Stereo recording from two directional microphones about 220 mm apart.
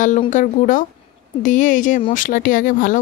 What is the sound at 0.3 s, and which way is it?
Speech, 35° left (ahead or behind).